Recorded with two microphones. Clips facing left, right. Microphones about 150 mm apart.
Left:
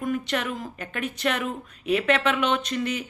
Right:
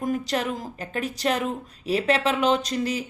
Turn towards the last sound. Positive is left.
turn(degrees=-35)  # may be behind; listen again after turning